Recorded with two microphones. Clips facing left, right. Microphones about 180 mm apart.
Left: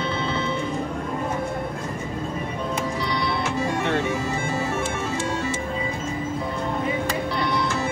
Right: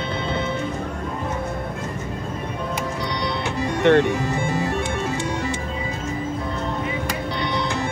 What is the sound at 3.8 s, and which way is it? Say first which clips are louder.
Speech: right 13 dB; 70° right (ahead or behind).